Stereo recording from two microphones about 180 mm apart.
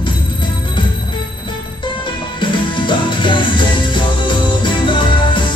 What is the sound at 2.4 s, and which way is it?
Music, 25° left (ahead or behind).